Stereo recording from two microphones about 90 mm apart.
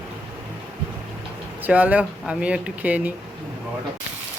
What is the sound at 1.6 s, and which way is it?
Speech, 15° right (ahead or behind).